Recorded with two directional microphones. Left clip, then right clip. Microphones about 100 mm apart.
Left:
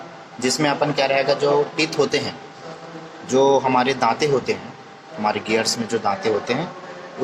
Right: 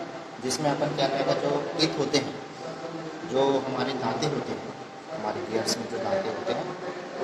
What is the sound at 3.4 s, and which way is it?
Speech, 30° left (ahead or behind).